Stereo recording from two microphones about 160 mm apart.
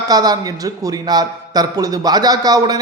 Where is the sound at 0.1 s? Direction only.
25° right (ahead or behind).